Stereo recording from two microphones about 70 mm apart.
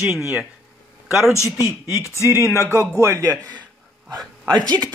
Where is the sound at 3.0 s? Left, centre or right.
Right.